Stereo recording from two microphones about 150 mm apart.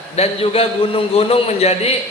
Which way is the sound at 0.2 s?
40° left (ahead or behind).